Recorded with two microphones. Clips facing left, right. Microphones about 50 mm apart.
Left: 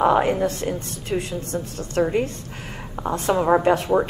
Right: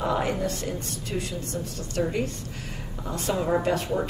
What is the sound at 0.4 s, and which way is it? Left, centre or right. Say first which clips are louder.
A woman's voice: left 6 dB; left.